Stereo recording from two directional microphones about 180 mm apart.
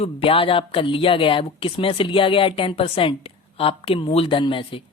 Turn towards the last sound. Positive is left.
turn(degrees=30)  # may be behind; listen again after turning